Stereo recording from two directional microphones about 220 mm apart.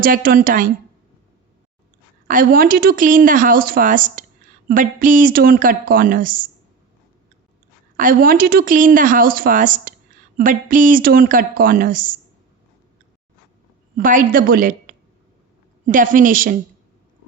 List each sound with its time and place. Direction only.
0.0 s speech: 40° right (ahead or behind)
2.2 s speech: 40° right (ahead or behind)
7.9 s speech: 40° right (ahead or behind)
13.9 s a woman's voice: 35° right (ahead or behind)